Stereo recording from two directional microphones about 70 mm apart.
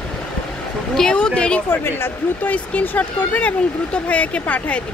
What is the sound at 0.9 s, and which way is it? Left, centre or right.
Speech, centre.